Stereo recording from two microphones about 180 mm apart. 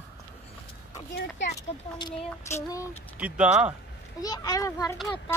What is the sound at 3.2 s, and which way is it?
Speech, 5° right (ahead or behind).